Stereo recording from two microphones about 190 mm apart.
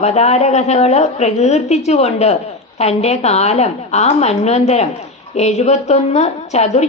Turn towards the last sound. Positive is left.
turn(degrees=35)  # may be behind; listen again after turning